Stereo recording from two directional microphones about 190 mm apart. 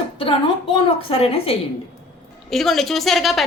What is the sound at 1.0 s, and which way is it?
Speech, 30° left (ahead or behind).